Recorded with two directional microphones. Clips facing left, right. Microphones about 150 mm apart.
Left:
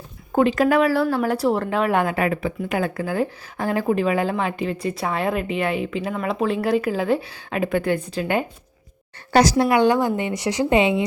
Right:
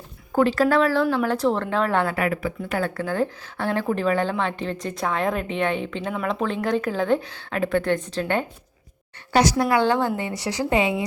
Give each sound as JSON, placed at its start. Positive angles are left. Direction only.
{"t": 0.3, "sound": "speech", "side_deg": 15}
{"t": 2.1, "sound": "speech", "side_deg": 25}
{"t": 9.3, "sound": "speech", "side_deg": 35}
{"t": 9.6, "sound": "a woman's voice", "side_deg": 15}